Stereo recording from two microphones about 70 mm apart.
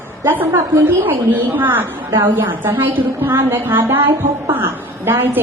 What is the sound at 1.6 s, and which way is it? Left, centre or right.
Speech, right.